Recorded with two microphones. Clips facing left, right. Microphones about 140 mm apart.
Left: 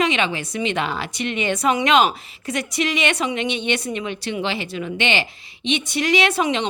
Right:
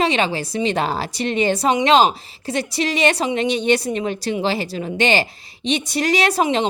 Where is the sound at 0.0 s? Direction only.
35° right (ahead or behind).